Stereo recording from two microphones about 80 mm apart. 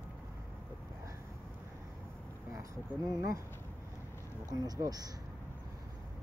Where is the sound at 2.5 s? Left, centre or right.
Right.